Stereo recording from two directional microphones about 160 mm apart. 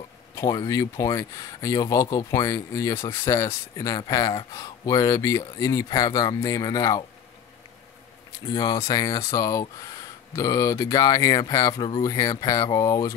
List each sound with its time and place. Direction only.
0.4 s speech: 20° left (ahead or behind)
8.5 s speech: 25° left (ahead or behind)